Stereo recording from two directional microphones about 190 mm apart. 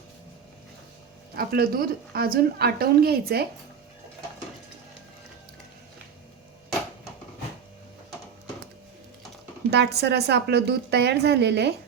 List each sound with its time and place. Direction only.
1.4 s a woman's voice: 50° right (ahead or behind)
9.6 s a woman's voice: 60° right (ahead or behind)